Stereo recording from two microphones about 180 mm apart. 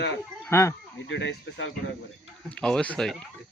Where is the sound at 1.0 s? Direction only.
90° left.